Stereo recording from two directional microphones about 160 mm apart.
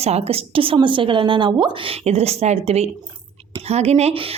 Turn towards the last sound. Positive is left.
turn(degrees=-40)  # may be behind; listen again after turning